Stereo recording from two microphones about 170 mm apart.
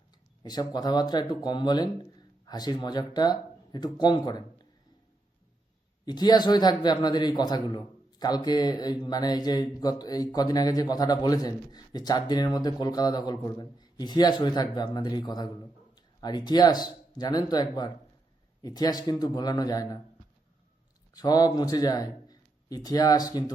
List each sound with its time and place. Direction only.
0.4 s speech: 25° left (ahead or behind)
6.1 s speech: 25° left (ahead or behind)
21.1 s a man's voice: 20° left (ahead or behind)